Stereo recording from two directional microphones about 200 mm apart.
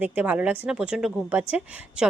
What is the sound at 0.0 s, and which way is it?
A woman's voice, 10° right (ahead or behind).